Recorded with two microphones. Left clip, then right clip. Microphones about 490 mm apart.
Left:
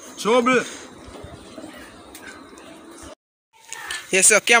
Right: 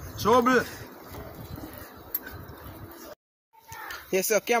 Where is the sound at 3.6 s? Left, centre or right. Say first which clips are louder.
Left 6 dB; right.